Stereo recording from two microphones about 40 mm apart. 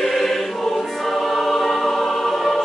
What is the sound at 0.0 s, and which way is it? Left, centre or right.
Choir, centre.